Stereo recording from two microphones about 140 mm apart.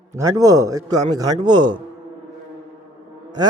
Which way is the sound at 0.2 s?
25° right (ahead or behind).